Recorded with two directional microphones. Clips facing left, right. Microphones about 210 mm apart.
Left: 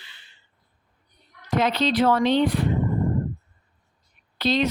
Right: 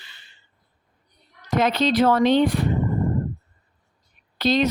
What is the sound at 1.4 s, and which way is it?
Speech, 45° right (ahead or behind).